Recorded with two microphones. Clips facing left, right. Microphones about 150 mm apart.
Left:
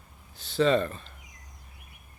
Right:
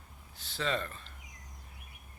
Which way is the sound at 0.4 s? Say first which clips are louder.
Left 11 dB; 20° left (ahead or behind).